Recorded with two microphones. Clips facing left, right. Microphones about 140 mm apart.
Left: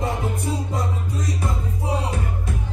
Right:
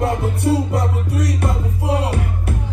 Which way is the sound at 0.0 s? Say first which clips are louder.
Right 6 dB; 70° right (ahead or behind).